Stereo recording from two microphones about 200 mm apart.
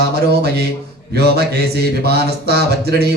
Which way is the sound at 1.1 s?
50° right (ahead or behind).